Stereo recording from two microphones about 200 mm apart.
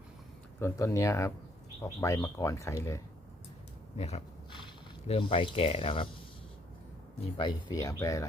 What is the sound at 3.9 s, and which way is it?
Speech, 30° left (ahead or behind).